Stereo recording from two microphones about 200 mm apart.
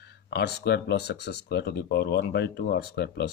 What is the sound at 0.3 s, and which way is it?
Speech, 55° left (ahead or behind).